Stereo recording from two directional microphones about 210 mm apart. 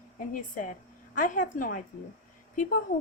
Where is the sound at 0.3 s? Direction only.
40° left (ahead or behind).